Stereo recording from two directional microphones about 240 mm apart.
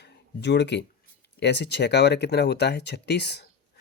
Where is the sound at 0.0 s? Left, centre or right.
Left.